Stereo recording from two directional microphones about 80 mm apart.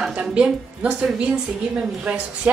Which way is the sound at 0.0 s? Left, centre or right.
Centre.